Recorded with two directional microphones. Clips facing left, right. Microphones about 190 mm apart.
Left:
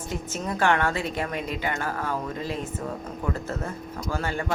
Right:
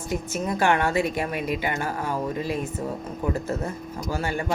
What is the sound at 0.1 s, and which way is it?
Speech, 10° right (ahead or behind).